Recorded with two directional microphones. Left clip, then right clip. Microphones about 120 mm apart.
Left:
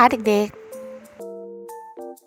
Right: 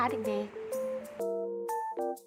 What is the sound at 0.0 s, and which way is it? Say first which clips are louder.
Speech: left 15 dB; 90° left.